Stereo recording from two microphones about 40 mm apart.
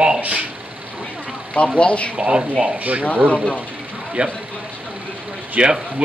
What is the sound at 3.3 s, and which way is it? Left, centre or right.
Speech, left.